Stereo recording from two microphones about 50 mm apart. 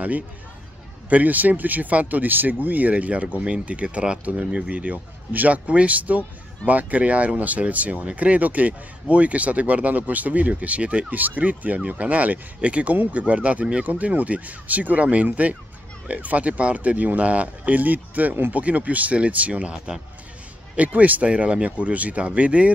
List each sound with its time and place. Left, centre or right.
1.1 s speech: right
21.3 s speech: right